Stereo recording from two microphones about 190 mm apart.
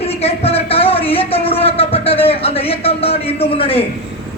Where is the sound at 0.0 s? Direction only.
30° left (ahead or behind).